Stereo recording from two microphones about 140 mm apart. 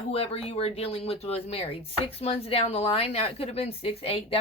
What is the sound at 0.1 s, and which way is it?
Speech, 45° left (ahead or behind).